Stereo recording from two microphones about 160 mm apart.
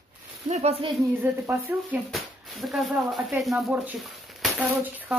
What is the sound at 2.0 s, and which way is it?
Speech, centre (ahead or behind).